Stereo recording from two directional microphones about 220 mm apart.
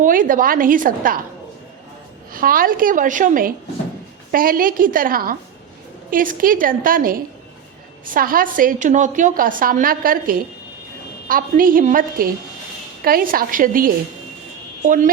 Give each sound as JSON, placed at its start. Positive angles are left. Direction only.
{"t": 0.0, "sound": "a woman's voice", "side_deg": -40}
{"t": 2.3, "sound": "a woman's voice", "side_deg": -40}